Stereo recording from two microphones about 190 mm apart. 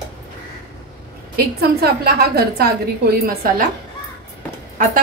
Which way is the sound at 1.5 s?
55° right (ahead or behind).